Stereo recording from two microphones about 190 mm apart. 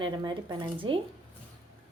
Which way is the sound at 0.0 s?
25° right (ahead or behind).